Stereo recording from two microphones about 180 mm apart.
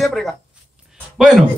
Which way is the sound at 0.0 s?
Centre (ahead or behind).